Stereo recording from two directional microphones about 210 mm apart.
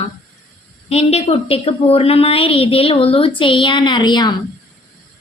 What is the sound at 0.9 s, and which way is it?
A woman's voice, 30° left (ahead or behind).